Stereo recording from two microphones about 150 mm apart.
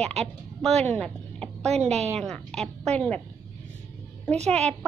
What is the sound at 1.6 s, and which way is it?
Speech, 45° right (ahead or behind).